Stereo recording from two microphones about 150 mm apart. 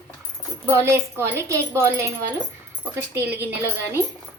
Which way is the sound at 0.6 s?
20° right (ahead or behind).